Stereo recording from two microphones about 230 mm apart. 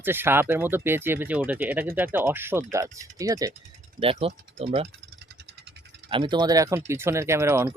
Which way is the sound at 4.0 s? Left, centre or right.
Right.